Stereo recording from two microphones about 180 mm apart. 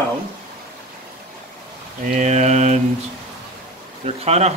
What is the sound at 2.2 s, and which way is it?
Speech, 40° right (ahead or behind).